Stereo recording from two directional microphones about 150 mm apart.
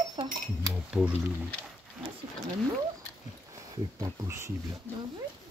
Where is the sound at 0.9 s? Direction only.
10° right (ahead or behind).